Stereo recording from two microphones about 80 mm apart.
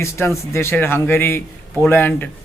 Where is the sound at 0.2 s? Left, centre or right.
Left.